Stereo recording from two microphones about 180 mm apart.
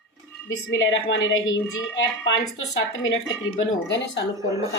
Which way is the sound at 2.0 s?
90° left.